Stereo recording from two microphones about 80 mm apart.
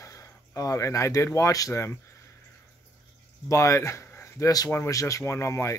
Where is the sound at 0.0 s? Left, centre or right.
Left.